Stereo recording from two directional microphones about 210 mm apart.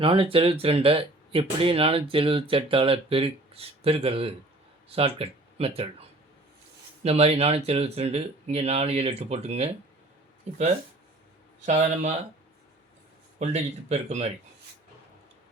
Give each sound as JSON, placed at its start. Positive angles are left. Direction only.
{"t": 0.0, "sound": "speech", "side_deg": -25}
{"t": 7.0, "sound": "speech", "side_deg": -30}
{"t": 11.6, "sound": "speech", "side_deg": -35}
{"t": 13.4, "sound": "speech", "side_deg": -30}